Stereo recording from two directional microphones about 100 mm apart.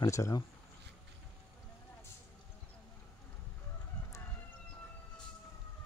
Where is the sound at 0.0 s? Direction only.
30° left (ahead or behind).